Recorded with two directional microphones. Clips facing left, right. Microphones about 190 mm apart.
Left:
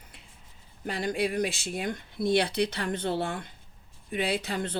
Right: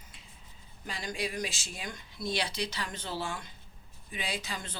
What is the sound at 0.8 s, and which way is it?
Speech, 60° left (ahead or behind).